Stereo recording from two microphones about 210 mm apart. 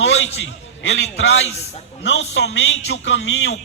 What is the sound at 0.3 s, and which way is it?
A man's voice, 60° left (ahead or behind).